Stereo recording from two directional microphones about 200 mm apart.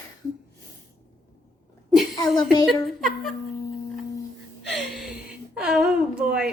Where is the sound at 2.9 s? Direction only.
Centre (ahead or behind).